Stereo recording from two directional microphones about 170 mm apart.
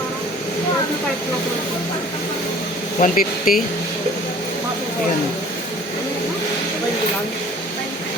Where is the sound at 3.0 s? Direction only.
55° left (ahead or behind).